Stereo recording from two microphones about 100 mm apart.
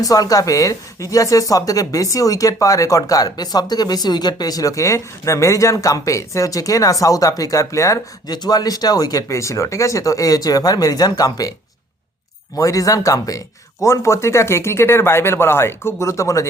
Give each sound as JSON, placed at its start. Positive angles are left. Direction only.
{"t": 0.0, "sound": "speech", "side_deg": 35}
{"t": 12.5, "sound": "speech", "side_deg": 35}